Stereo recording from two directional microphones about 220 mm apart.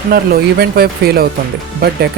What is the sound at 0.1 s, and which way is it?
Speech, 45° right (ahead or behind).